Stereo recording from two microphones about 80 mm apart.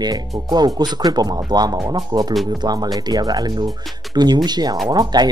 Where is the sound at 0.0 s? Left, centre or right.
Right.